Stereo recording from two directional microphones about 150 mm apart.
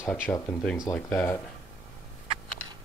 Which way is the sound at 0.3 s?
15° left (ahead or behind).